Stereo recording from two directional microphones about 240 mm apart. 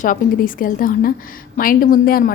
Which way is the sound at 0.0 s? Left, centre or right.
Left.